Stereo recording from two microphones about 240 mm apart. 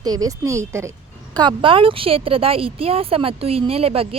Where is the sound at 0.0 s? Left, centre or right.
Centre.